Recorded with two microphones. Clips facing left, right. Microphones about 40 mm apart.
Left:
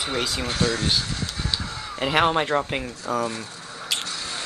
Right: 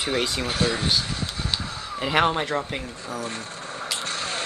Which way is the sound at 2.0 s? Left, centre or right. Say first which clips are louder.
Left 1 dB; centre.